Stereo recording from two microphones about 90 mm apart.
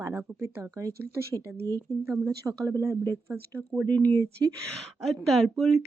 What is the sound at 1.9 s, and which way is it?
Speech, 35° left (ahead or behind).